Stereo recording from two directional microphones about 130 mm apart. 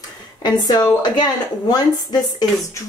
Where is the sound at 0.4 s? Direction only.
30° left (ahead or behind).